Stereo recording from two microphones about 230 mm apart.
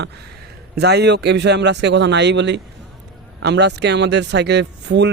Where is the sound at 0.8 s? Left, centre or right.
Right.